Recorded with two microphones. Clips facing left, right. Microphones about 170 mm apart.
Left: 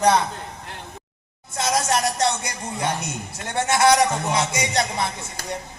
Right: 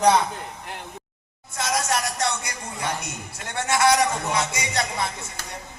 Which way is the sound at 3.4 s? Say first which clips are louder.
Left 3 dB; 20° left (ahead or behind).